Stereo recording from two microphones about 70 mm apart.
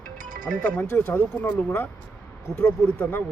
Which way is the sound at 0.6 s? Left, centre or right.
Left.